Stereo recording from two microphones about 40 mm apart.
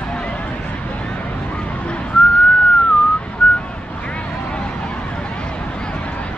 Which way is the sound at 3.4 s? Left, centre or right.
Left.